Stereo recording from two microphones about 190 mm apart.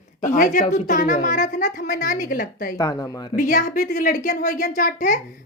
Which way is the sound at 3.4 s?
45° left (ahead or behind).